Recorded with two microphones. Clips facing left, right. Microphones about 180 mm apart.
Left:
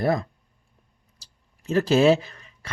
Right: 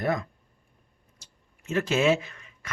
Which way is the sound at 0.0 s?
35° left (ahead or behind).